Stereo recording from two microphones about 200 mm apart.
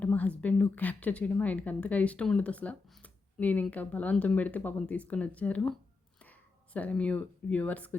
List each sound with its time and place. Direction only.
0.0 s a woman's voice: 5° left (ahead or behind)